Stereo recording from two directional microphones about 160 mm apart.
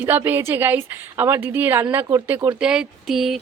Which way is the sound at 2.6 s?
5° right (ahead or behind).